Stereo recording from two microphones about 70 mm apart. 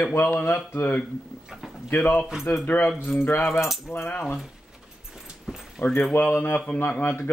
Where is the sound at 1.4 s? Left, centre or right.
Centre.